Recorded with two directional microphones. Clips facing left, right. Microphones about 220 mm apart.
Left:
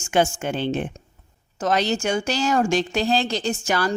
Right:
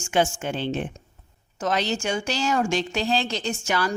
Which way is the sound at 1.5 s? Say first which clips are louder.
Left 3 dB; 40° left (ahead or behind).